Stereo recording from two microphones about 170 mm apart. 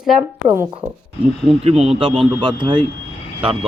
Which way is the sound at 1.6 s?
35° right (ahead or behind).